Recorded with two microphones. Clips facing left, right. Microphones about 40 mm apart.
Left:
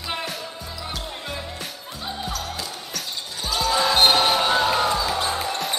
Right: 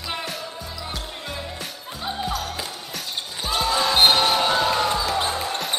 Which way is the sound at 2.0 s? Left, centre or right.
Centre.